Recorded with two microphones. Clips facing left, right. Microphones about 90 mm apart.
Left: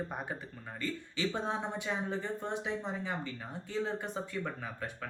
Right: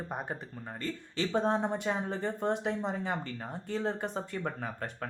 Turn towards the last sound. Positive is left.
turn(degrees=-45)  # may be behind; listen again after turning